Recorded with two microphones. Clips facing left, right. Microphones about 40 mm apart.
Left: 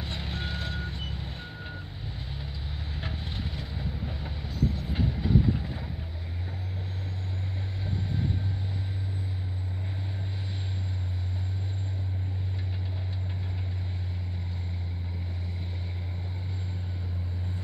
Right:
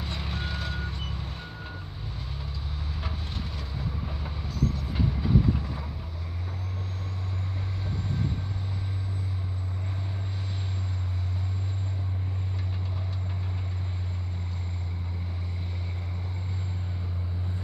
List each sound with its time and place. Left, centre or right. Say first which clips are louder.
0.0 s vehicle: right 1 dB; centre
3.0 s vehicle: left 1 dB; centre
4.0 s train: right 1 dB; centre